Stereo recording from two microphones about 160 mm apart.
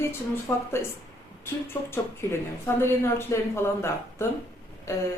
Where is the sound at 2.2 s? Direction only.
15° left (ahead or behind).